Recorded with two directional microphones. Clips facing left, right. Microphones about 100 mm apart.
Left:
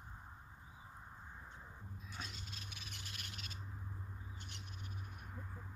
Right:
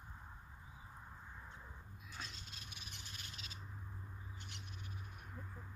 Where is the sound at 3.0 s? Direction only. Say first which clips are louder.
Left 2 dB; 65° left (ahead or behind).